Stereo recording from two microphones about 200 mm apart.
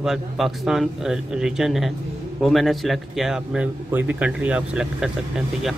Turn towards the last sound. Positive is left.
turn(degrees=-5)  # may be behind; listen again after turning